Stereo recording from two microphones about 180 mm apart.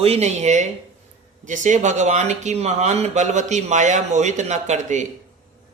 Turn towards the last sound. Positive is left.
turn(degrees=-40)  # may be behind; listen again after turning